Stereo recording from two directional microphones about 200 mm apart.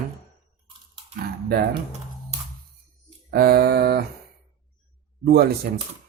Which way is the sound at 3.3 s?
50° right (ahead or behind).